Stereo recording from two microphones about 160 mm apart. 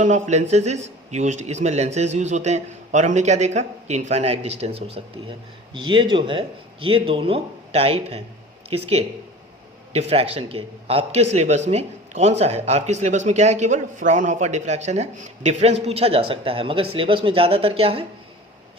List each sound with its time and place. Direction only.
0.0 s a man's voice: 45° right (ahead or behind)